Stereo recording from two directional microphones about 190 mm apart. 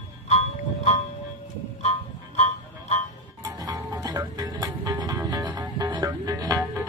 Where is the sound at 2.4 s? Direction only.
35° left (ahead or behind).